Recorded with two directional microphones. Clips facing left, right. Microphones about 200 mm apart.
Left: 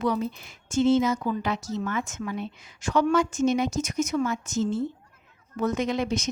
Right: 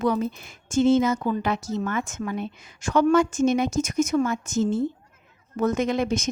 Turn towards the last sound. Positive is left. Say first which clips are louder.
# right 3 dB
turn(degrees=-50)  # may be behind; listen again after turning